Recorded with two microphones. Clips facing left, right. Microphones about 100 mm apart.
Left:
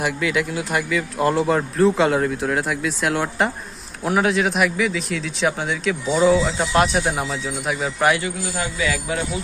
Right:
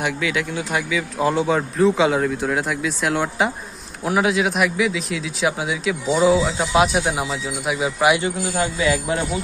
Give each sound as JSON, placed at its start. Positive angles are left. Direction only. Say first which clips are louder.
{"t": 0.0, "sound": "a man's voice", "louder": "left 1 dB", "side_deg": 0}
{"t": 8.5, "sound": "speech", "louder": "right 4 dB", "side_deg": -30}